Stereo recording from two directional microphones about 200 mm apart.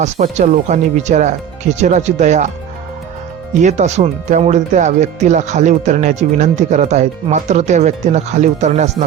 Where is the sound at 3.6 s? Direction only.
35° right (ahead or behind).